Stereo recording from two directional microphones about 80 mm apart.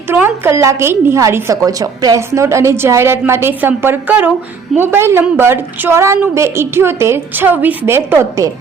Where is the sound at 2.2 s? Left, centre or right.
Right.